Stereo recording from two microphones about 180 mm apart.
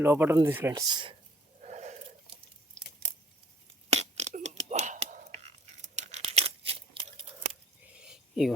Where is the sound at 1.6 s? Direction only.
40° right (ahead or behind).